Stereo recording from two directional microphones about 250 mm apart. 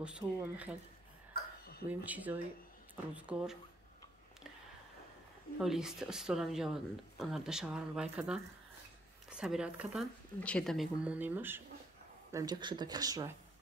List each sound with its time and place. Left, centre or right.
0.0 s a woman's voice: centre
1.9 s a woman's voice: centre
5.6 s a woman's voice: centre